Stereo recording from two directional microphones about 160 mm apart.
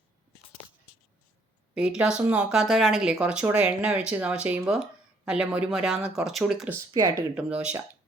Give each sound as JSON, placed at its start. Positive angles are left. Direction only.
{"t": 1.7, "sound": "speech", "side_deg": -5}
{"t": 6.7, "sound": "speech", "side_deg": -20}
{"t": 7.3, "sound": "speech", "side_deg": -10}